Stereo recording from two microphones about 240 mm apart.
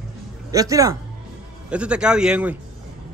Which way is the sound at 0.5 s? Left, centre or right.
Centre.